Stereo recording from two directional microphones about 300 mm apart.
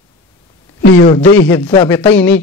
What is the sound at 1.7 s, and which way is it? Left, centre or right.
Speech, centre.